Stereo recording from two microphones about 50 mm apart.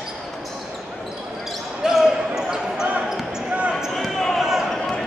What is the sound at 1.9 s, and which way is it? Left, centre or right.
Basketball bounce, centre.